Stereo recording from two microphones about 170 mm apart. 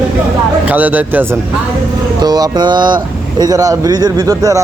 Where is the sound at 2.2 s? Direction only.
25° right (ahead or behind).